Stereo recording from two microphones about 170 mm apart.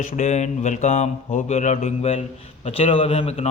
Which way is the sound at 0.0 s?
45° left (ahead or behind).